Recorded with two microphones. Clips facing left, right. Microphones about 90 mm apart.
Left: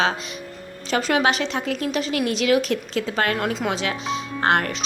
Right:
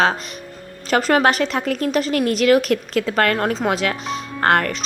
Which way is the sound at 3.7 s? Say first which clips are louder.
Right 3 dB; 55° right (ahead or behind).